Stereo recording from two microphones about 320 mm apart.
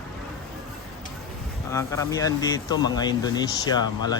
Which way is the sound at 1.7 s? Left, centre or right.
Centre.